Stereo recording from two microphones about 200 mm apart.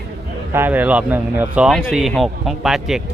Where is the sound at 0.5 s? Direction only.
10° right (ahead or behind).